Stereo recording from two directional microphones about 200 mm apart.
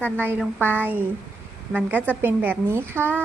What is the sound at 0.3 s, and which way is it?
Speech, 10° right (ahead or behind).